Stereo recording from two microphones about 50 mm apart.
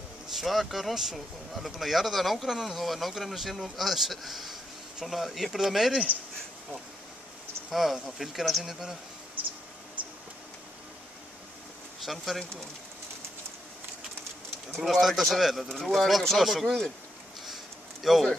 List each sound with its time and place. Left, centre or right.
0.3 s speech: centre
7.7 s speech: centre
10.0 s a sound: right
12.0 s speech: centre
14.8 s speech: centre
18.1 s speech: centre